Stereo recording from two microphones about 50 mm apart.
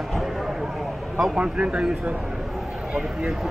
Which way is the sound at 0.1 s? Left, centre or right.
Centre.